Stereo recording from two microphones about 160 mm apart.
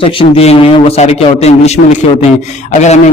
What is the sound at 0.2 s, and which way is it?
A man's voice, 40° left (ahead or behind).